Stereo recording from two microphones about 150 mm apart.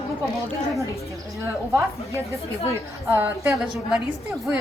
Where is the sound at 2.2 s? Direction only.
20° right (ahead or behind).